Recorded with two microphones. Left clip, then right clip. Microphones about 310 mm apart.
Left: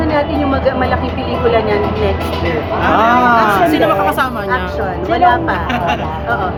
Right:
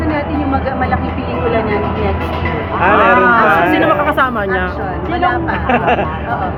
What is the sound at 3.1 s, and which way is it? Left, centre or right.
Speech, left.